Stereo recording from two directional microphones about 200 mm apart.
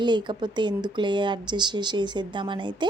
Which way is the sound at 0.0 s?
20° right (ahead or behind).